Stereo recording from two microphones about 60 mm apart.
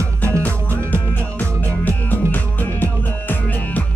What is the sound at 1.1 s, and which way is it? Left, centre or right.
Music, left.